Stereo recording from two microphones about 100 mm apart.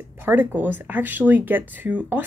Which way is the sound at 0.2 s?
20° right (ahead or behind).